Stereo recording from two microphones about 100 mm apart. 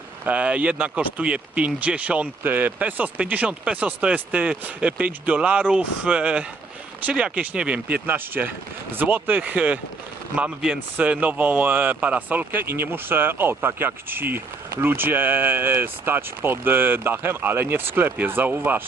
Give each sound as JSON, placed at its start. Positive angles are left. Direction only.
{"t": 0.3, "sound": "speech", "side_deg": -15}